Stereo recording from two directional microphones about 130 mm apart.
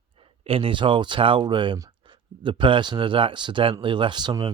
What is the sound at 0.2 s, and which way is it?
Speech, 45° right (ahead or behind).